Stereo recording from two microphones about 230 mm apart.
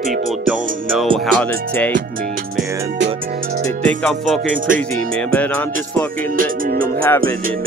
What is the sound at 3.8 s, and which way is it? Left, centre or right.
Music, centre.